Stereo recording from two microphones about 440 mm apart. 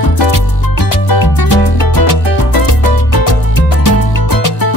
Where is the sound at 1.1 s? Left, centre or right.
Left.